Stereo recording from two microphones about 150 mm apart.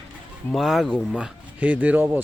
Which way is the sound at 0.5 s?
Centre (ahead or behind).